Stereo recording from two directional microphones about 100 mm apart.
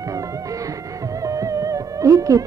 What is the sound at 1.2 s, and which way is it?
Music, 35° right (ahead or behind).